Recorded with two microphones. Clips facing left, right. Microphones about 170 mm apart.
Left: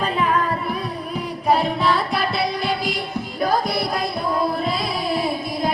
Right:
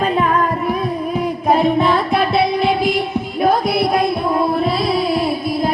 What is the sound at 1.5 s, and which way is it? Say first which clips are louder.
Music: right 4 dB; 50° right (ahead or behind).